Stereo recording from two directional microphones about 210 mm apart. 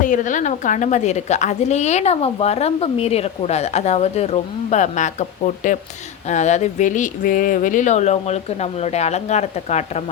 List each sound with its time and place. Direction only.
0.0 s a woman's voice: 35° left (ahead or behind)
6.2 s a woman's voice: 35° left (ahead or behind)